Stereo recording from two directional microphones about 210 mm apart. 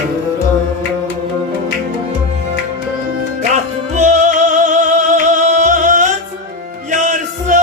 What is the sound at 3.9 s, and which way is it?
Music, 35° right (ahead or behind).